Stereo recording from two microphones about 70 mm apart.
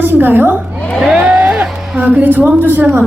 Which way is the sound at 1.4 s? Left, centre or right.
Right.